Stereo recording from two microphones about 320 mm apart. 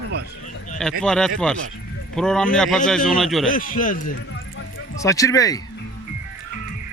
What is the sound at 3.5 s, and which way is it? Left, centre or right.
Speech, left.